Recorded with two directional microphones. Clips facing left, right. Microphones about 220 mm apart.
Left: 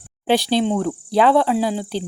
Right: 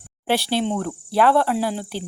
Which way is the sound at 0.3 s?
15° left (ahead or behind).